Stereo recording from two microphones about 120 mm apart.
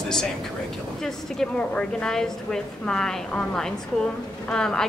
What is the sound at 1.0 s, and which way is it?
A woman's voice, 5° left (ahead or behind).